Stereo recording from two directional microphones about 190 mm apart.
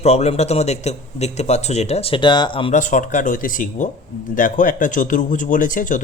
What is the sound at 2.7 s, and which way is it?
Speech, 40° left (ahead or behind).